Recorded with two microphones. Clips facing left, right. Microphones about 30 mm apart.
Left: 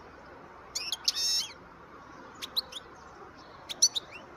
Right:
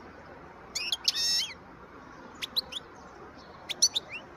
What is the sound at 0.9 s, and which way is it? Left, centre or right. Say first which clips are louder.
Bird: right 2 dB; right.